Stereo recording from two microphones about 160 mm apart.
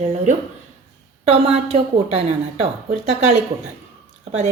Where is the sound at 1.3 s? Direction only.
40° right (ahead or behind).